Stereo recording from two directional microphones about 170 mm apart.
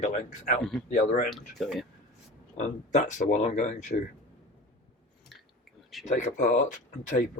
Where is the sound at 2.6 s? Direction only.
45° left (ahead or behind).